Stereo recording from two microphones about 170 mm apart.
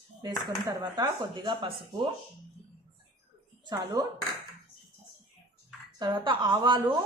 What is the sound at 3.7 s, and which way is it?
Speech, 20° right (ahead or behind).